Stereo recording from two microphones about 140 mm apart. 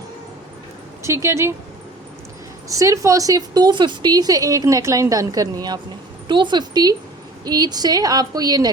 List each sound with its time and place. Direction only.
1.0 s a woman's voice: 20° right (ahead or behind)
2.6 s a woman's voice: 25° right (ahead or behind)